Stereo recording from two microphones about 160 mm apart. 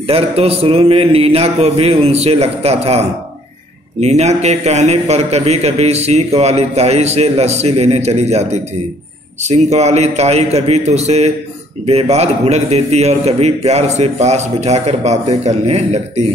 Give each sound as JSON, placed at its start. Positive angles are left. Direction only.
{"t": 0.0, "sound": "a man's voice", "side_deg": -40}